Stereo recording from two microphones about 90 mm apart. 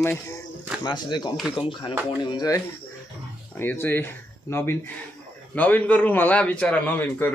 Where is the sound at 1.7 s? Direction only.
60° left (ahead or behind).